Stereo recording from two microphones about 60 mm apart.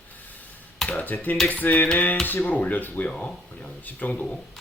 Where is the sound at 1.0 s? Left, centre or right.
Left.